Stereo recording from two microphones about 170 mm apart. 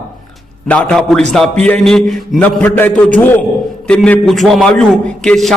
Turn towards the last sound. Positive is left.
turn(degrees=5)  # may be behind; listen again after turning